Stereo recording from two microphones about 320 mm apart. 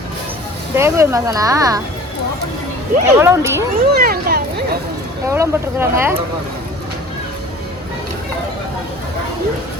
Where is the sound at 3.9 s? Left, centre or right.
Right.